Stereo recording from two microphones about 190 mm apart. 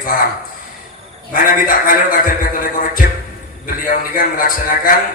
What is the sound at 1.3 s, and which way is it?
A man's voice, 45° left (ahead or behind).